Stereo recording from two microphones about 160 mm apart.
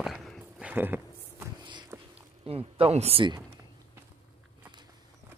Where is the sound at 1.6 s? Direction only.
30° right (ahead or behind).